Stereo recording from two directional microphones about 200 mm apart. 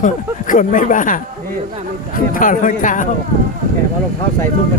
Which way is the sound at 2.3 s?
40° left (ahead or behind).